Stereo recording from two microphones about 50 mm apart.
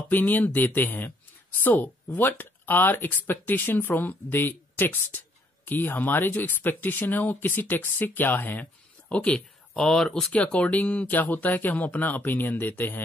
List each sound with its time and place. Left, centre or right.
0.1 s speech: left
9.1 s speech: left
9.8 s speech: centre
10.3 s speech: left